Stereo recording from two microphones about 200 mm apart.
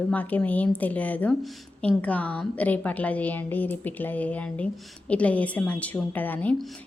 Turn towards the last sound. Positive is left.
turn(degrees=10)  # may be behind; listen again after turning